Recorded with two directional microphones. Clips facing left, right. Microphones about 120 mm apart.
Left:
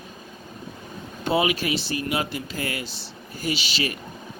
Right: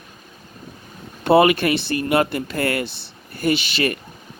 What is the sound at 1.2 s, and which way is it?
Speech, 60° right (ahead or behind).